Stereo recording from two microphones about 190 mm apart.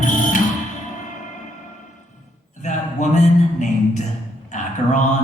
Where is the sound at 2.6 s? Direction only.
40° left (ahead or behind).